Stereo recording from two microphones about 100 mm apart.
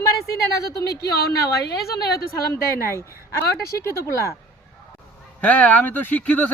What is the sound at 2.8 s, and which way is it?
Speech, 25° left (ahead or behind).